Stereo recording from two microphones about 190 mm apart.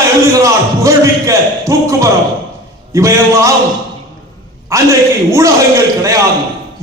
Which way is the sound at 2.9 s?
15° right (ahead or behind).